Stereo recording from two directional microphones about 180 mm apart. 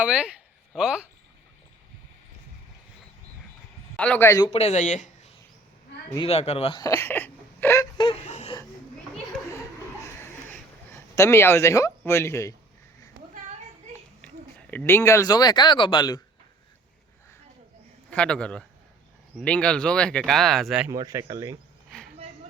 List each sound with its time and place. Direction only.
0.0 s speech: 5° right (ahead or behind)
3.9 s speech: 5° left (ahead or behind)
4.5 s speech: 40° left (ahead or behind)
6.7 s speech: 15° left (ahead or behind)
7.9 s a sound: 25° left (ahead or behind)
8.3 s whimper: 40° left (ahead or behind)
10.5 s a sound: 15° left (ahead or behind)
14.7 s a man's voice: 10° left (ahead or behind)
18.1 s speech: 5° left (ahead or behind)
20.9 s speech: 20° right (ahead or behind)
21.8 s a sound: centre (ahead or behind)